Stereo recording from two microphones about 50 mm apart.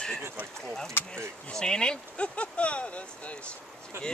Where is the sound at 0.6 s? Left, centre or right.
Centre.